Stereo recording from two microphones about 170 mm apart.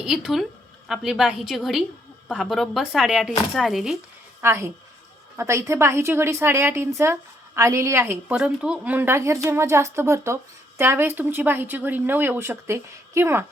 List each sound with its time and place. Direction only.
0.0 s speech: centre (ahead or behind)
4.4 s a woman's voice: 15° right (ahead or behind)